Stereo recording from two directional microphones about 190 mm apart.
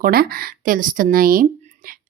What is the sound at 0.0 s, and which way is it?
A woman's voice, 55° right (ahead or behind).